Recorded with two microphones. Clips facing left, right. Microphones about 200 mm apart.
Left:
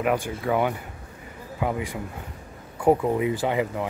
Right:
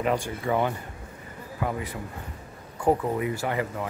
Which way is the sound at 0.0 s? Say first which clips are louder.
Left 2 dB; 10° left (ahead or behind).